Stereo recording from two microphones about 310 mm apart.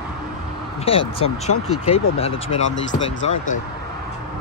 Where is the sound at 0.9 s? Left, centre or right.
Centre.